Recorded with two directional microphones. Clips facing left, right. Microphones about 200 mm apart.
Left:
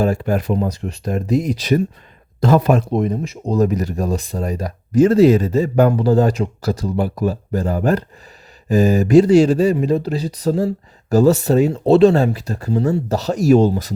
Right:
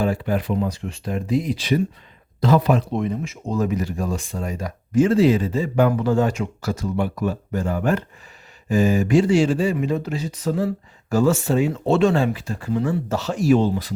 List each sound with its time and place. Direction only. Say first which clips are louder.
0.0 s speech: left 4 dB; 45° left (ahead or behind)